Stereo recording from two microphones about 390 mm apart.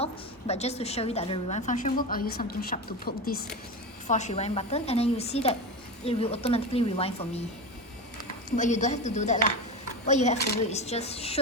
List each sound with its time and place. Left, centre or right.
0.0 s a woman's voice: centre
8.4 s a woman's voice: centre